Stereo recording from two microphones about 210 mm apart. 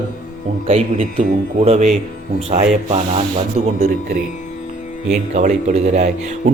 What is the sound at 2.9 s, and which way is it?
Speech, 30° right (ahead or behind).